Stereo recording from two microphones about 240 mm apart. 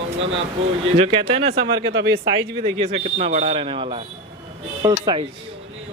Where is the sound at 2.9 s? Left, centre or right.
Right.